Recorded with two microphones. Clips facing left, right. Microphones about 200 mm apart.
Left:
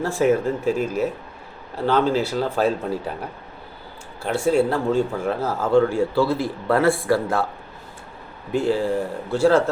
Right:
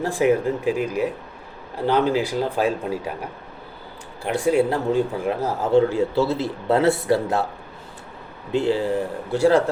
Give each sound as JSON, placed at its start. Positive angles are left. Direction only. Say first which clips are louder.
{"t": 0.0, "sound": "speech", "louder": "even", "side_deg": -15}
{"t": 4.2, "sound": "speech", "louder": "even", "side_deg": -15}
{"t": 8.5, "sound": "speech", "louder": "even", "side_deg": -20}